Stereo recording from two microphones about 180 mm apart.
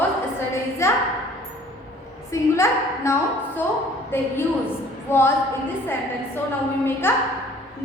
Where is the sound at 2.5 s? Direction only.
15° left (ahead or behind).